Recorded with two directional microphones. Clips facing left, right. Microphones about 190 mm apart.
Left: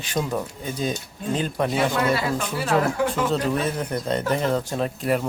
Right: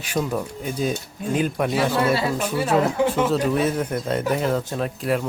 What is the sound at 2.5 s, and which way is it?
Speech, 25° right (ahead or behind).